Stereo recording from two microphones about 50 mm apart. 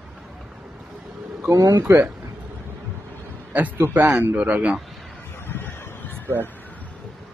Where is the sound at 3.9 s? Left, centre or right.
Right.